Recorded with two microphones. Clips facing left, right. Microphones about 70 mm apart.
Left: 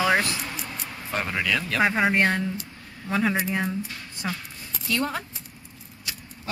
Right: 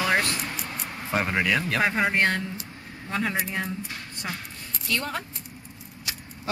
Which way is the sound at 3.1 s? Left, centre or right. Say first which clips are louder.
Left 4 dB; centre.